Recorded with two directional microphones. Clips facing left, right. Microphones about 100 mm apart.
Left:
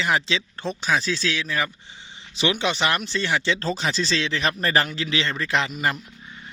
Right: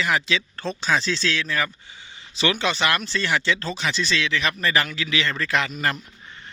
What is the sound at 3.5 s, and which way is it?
Speech, 35° left (ahead or behind).